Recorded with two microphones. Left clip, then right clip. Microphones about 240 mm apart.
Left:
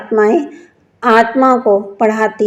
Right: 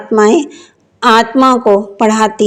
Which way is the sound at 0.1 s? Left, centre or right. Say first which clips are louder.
Right 3 dB; right.